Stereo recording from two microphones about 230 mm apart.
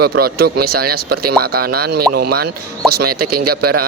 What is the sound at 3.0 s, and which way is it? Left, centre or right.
Speech, right.